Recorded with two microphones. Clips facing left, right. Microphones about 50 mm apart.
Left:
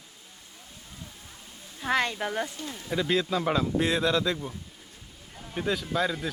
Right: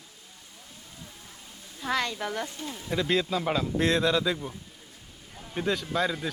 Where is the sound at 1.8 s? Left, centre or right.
Left.